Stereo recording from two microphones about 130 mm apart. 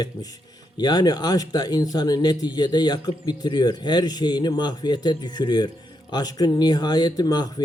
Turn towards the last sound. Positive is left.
turn(degrees=30)  # may be behind; listen again after turning